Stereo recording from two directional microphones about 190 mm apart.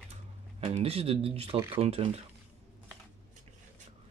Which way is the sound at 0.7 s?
30° right (ahead or behind).